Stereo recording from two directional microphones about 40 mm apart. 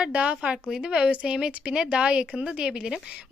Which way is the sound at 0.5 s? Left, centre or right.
Centre.